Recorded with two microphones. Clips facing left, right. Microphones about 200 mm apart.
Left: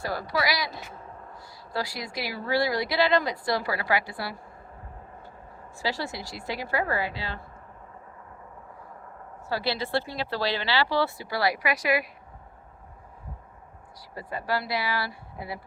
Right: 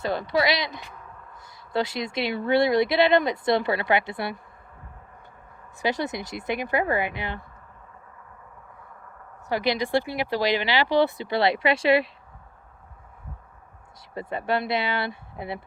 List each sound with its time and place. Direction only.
0.0 s speech: 20° right (ahead or behind)
5.8 s speech: 20° right (ahead or behind)
9.5 s speech: 15° right (ahead or behind)
14.1 s speech: 25° right (ahead or behind)